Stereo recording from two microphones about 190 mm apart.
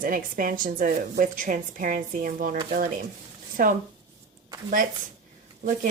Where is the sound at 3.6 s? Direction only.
50° right (ahead or behind).